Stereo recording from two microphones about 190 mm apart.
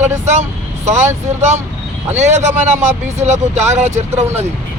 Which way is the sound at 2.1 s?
40° right (ahead or behind).